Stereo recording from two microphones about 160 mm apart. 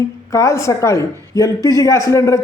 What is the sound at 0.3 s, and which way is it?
A man's voice, 20° left (ahead or behind).